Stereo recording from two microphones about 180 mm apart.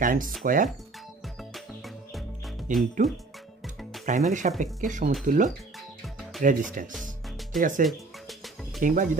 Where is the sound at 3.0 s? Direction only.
45° right (ahead or behind).